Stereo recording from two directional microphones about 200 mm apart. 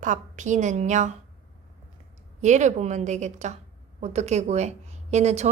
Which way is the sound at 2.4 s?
35° right (ahead or behind).